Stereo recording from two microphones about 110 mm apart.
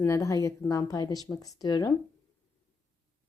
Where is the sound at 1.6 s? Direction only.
40° left (ahead or behind).